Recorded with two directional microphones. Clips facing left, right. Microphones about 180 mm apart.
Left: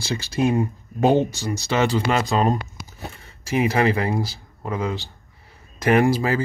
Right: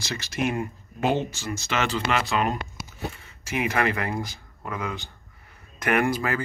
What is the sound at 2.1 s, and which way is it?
Speech, 35° left (ahead or behind).